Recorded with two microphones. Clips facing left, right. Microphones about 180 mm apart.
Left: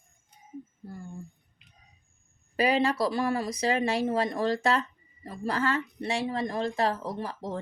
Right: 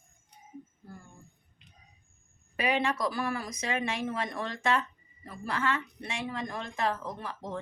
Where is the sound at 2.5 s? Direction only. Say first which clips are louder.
Left 5 dB; 35° left (ahead or behind).